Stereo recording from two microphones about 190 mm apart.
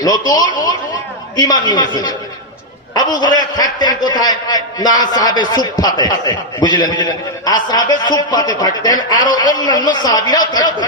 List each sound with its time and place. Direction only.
0.0 s a man's voice: 20° left (ahead or behind)